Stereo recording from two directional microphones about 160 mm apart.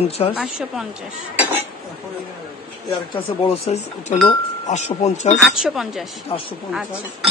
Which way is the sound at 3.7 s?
40° left (ahead or behind).